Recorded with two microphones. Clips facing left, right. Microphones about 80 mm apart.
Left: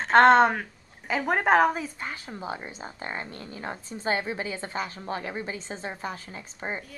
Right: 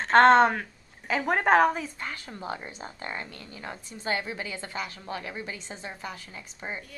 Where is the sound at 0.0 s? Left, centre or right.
Centre; by 6.8 s left.